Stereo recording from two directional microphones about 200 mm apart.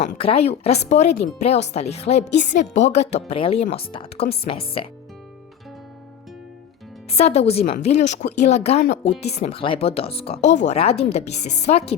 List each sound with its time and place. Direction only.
0.2 s a woman's voice: 30° left (ahead or behind)
7.1 s a woman's voice: 30° left (ahead or behind)